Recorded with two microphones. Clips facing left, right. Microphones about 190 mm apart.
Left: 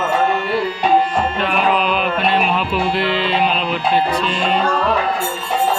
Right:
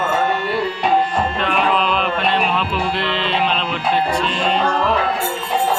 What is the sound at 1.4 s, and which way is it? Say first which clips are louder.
Music: left 1 dB; 5° left (ahead or behind).